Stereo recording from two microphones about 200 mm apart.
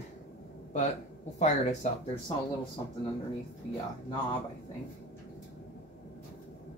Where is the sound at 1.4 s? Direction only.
35° left (ahead or behind).